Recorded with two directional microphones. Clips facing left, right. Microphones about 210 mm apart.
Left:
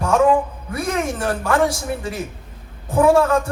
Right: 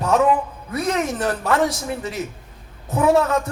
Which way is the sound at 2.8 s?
30° left (ahead or behind).